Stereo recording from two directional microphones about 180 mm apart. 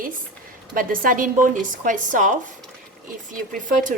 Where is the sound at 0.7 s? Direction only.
50° right (ahead or behind).